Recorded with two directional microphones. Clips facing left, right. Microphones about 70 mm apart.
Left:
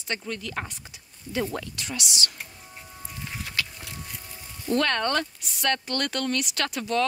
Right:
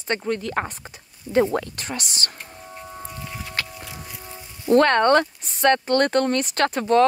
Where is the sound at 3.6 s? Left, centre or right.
Right.